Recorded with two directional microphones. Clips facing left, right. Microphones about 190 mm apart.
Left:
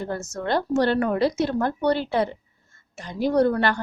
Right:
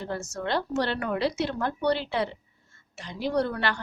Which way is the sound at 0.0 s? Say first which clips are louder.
Left 3 dB; 45° left (ahead or behind).